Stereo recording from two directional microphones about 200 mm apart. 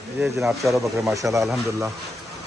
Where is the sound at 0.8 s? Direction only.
15° right (ahead or behind).